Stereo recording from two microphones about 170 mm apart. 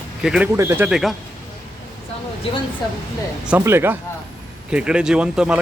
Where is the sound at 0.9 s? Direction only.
Centre (ahead or behind).